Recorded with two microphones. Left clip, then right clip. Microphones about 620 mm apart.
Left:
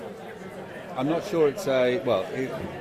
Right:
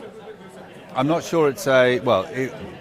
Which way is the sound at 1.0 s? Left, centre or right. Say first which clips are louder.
Right 4 dB; right.